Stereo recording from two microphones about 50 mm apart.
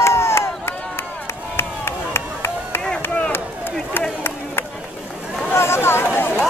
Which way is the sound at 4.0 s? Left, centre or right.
Left.